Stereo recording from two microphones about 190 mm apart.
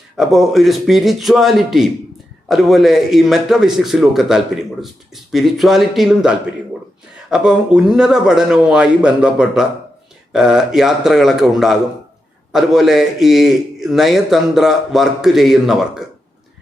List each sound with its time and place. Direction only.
0.2 s a man's voice: centre (ahead or behind)